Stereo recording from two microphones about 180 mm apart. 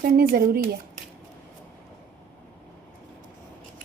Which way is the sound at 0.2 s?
55° right (ahead or behind).